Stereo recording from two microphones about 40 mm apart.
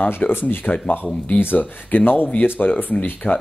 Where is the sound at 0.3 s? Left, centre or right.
Left.